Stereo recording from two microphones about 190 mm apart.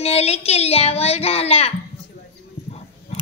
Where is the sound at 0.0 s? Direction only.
35° left (ahead or behind).